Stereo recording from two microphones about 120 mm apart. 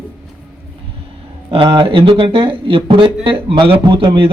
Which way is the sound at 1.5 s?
45° right (ahead or behind).